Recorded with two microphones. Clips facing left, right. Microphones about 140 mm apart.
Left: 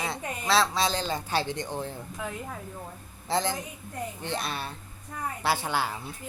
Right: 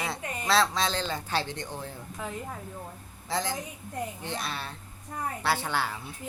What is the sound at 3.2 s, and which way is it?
A woman's voice, 25° left (ahead or behind).